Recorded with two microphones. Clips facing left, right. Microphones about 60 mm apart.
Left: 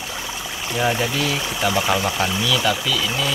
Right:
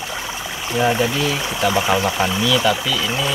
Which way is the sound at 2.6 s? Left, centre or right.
Centre.